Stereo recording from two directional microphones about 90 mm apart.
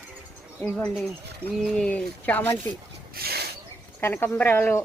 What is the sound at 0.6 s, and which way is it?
Speech, 10° left (ahead or behind).